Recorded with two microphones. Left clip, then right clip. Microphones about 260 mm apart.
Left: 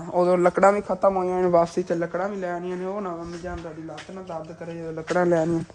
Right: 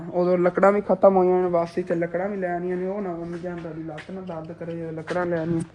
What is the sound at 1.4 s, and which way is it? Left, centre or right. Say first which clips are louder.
Speech: left 3 dB; left.